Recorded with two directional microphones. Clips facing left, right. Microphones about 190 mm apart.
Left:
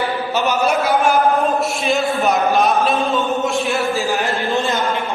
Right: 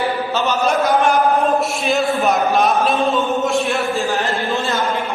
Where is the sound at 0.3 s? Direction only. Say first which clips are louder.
Left 1 dB; 10° left (ahead or behind).